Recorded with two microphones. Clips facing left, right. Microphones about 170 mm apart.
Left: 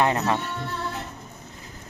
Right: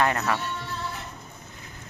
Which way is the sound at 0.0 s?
20° left (ahead or behind).